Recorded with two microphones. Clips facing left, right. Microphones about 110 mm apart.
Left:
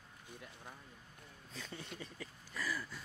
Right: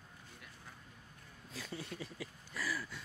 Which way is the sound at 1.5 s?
5° right (ahead or behind).